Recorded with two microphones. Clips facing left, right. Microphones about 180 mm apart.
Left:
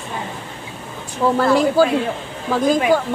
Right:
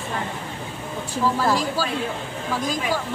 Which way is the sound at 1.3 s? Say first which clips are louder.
Left 8 dB; 60° left (ahead or behind).